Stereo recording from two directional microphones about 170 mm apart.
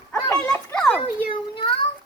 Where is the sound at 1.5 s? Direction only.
30° left (ahead or behind).